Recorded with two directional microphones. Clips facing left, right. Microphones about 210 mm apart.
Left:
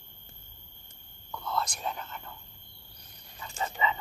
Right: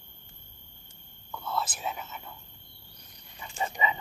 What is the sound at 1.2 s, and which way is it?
Whispering, 5° right (ahead or behind).